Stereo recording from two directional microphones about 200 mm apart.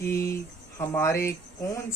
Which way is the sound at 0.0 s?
15° left (ahead or behind).